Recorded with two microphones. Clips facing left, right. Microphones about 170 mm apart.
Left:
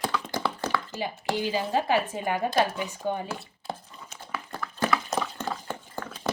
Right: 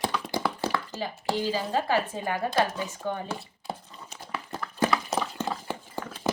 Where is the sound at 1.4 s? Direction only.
15° left (ahead or behind).